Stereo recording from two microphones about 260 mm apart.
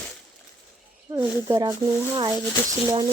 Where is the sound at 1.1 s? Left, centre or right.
Centre.